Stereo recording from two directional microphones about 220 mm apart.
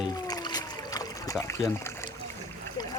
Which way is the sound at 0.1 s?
15° left (ahead or behind).